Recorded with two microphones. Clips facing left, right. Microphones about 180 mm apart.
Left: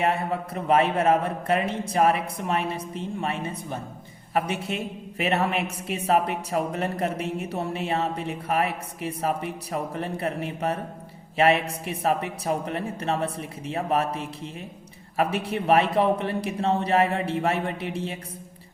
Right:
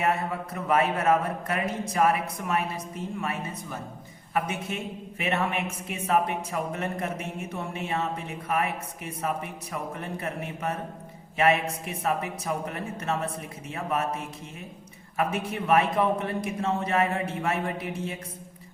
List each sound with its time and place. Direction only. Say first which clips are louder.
0.0 s a woman's voice: left 2 dB; 30° left (ahead or behind)